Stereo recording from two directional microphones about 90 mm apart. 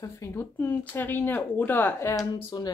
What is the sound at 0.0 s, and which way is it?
Speech, 30° left (ahead or behind).